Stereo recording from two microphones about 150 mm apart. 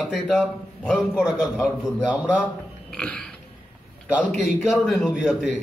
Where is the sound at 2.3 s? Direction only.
10° left (ahead or behind).